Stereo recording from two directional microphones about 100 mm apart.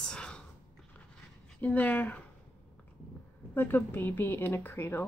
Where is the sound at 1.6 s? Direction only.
15° left (ahead or behind).